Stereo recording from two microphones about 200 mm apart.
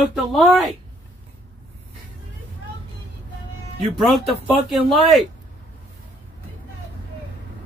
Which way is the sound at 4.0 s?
Centre (ahead or behind).